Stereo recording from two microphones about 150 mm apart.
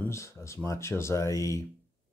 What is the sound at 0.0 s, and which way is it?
Speech, 20° left (ahead or behind).